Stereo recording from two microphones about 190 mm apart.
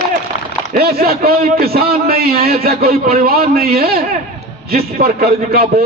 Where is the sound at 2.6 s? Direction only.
55° right (ahead or behind).